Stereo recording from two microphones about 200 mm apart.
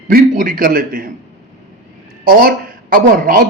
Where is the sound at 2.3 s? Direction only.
50° right (ahead or behind).